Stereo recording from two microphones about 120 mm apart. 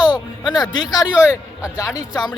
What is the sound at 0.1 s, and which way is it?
Speech, 35° left (ahead or behind).